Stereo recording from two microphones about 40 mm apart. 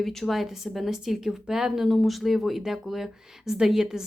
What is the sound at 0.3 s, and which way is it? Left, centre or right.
Speech, centre.